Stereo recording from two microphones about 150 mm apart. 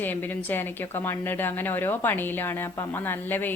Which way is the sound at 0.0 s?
15° left (ahead or behind).